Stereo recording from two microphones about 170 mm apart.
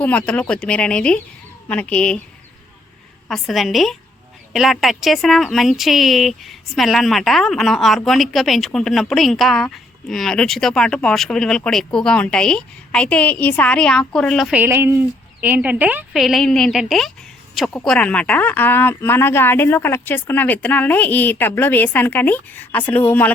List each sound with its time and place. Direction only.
0.0 s speech: 10° left (ahead or behind)
3.2 s speech: centre (ahead or behind)
14.6 s speech: 15° right (ahead or behind); by 23.3 s 10° left (ahead or behind)